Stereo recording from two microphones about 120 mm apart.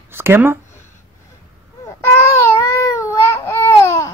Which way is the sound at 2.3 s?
25° left (ahead or behind).